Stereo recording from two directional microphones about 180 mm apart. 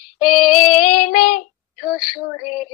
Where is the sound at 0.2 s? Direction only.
50° left (ahead or behind).